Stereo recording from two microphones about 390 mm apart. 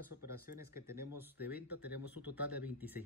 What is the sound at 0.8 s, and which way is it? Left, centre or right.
Speech, centre.